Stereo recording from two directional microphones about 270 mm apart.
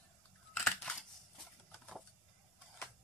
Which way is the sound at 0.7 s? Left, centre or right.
Centre.